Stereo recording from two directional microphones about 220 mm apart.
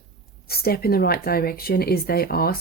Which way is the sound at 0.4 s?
45° left (ahead or behind).